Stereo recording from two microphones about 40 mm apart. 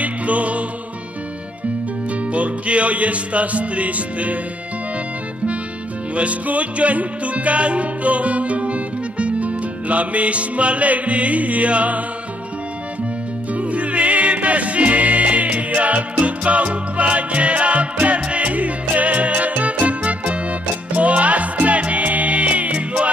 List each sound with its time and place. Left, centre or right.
0.0 s music: right
2.3 s music: right
6.1 s music: right
13.6 s music: right